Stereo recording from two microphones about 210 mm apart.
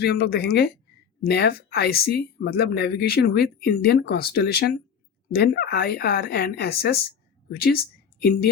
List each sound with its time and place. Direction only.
0.0 s speech: 50° left (ahead or behind)
8.2 s speech: 50° left (ahead or behind)